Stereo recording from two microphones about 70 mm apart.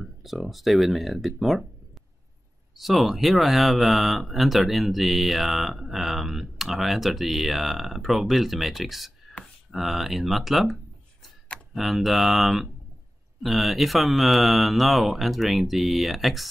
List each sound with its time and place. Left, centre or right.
0.0 s speech: centre
2.8 s speech: centre